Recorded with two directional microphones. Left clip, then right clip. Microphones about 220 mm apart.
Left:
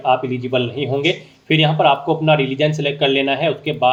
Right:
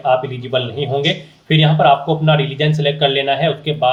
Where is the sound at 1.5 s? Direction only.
25° left (ahead or behind).